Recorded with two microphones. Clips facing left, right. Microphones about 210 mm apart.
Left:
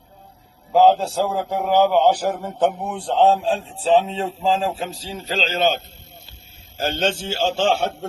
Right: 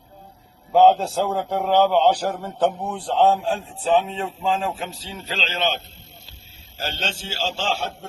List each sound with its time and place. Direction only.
0.7 s a man's voice: centre (ahead or behind); by 3.6 s 20° left (ahead or behind)
3.8 s speech: 35° left (ahead or behind); by 7.9 s 60° left (ahead or behind)